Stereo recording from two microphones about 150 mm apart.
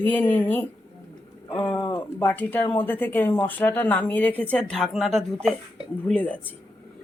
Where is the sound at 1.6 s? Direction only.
30° left (ahead or behind).